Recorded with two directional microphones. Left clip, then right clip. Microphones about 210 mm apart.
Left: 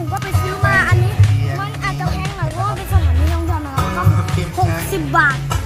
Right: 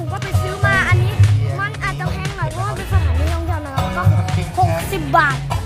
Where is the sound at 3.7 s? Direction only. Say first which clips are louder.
Left 1 dB; 40° right (ahead or behind).